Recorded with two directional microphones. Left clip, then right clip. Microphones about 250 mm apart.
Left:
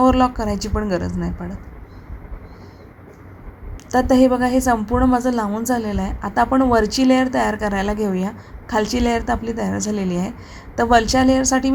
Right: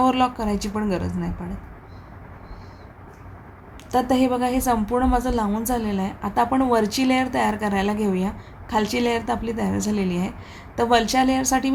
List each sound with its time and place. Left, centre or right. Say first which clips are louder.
0.0 s a woman's voice: left 4 dB; centre
3.9 s a woman's voice: left 5 dB; centre